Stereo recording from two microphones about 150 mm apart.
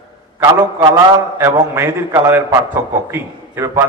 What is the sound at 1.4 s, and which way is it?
A man's voice, 15° right (ahead or behind).